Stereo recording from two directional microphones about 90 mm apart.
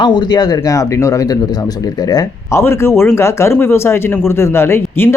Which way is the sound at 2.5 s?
30° left (ahead or behind).